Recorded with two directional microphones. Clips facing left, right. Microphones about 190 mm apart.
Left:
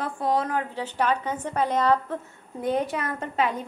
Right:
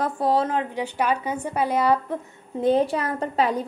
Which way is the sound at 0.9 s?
10° right (ahead or behind).